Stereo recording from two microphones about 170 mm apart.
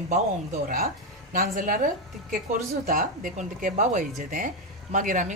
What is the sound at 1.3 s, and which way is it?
A woman's voice, 55° right (ahead or behind).